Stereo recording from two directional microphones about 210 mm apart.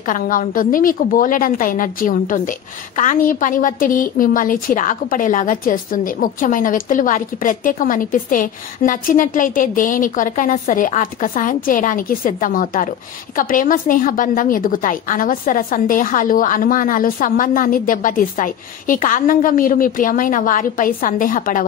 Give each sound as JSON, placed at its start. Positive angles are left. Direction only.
{"t": 0.0, "sound": "a woman's voice", "side_deg": 40}